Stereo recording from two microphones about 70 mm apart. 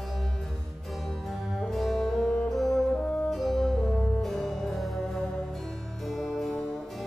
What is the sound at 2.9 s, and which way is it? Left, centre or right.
Brass instrument, centre.